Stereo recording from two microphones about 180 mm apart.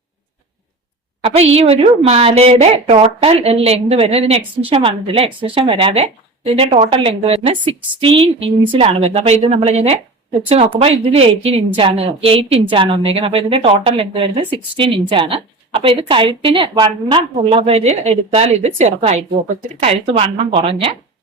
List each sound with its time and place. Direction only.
1.2 s a woman's voice: 35° right (ahead or behind)